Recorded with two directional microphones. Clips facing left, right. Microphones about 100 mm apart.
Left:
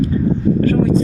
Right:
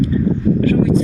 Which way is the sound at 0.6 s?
40° left (ahead or behind).